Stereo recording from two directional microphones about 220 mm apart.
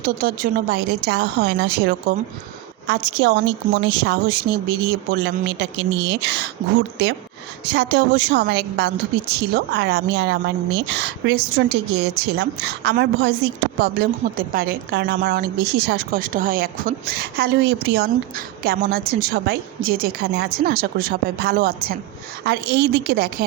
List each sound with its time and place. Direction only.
0.0 s a woman's voice: 40° right (ahead or behind)